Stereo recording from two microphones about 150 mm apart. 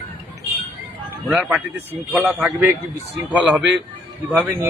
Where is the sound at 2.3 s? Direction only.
15° right (ahead or behind).